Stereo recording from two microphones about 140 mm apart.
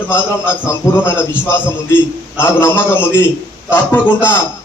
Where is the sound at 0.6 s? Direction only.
15° left (ahead or behind).